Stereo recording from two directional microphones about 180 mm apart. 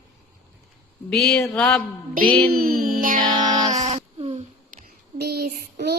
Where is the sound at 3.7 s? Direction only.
35° right (ahead or behind).